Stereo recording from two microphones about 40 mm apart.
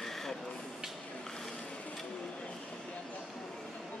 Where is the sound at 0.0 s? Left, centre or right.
Centre.